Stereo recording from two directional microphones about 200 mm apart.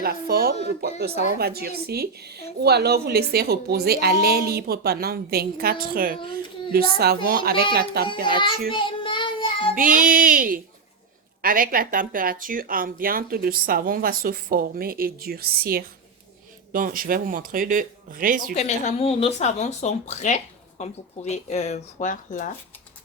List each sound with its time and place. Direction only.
0.0 s speech: 50° right (ahead or behind)
8.7 s child singing: 25° left (ahead or behind)
9.7 s speech: 45° right (ahead or behind)
18.5 s speech: 35° left (ahead or behind)